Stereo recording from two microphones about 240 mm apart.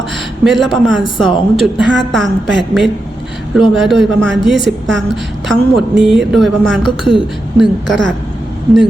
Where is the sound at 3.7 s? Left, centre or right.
Centre.